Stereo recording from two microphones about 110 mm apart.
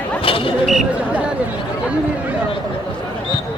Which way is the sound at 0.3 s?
55° left (ahead or behind).